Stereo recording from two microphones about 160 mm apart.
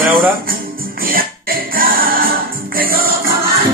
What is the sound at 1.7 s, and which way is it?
Music, 65° right (ahead or behind).